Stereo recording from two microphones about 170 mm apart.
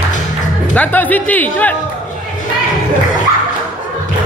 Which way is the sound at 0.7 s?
10° left (ahead or behind).